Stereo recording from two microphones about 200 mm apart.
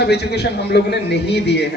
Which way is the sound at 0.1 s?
55° left (ahead or behind).